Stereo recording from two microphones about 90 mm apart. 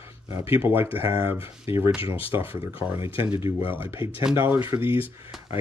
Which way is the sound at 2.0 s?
90° left.